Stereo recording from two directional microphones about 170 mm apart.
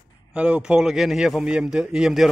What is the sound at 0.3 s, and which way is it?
A man's voice, 5° right (ahead or behind).